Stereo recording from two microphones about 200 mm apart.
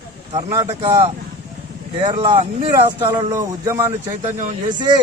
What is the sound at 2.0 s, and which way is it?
Speech, 35° right (ahead or behind).